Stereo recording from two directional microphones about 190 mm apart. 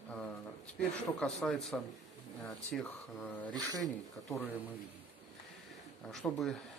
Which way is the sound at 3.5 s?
20° right (ahead or behind).